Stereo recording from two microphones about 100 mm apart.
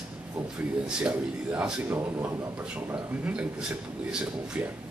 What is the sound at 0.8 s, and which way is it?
Speech, 10° right (ahead or behind).